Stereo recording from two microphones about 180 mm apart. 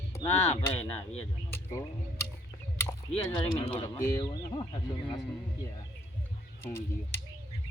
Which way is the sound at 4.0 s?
15° left (ahead or behind).